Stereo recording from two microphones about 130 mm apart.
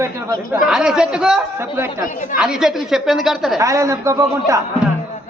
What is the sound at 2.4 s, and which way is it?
A man's voice, 5° right (ahead or behind).